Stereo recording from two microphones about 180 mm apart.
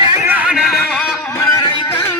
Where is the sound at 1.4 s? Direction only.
15° left (ahead or behind).